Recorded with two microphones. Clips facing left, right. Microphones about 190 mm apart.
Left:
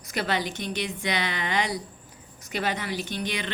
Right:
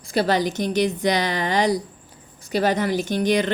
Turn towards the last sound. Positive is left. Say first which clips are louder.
# right 11 dB
turn(degrees=-40)  # may be behind; listen again after turning